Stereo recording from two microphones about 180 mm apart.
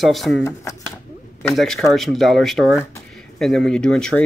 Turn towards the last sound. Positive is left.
turn(degrees=5)  # may be behind; listen again after turning